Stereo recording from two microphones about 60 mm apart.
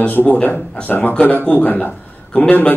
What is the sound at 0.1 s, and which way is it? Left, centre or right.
A man's voice, left.